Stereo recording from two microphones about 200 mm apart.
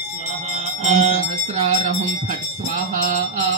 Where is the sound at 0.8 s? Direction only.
35° right (ahead or behind).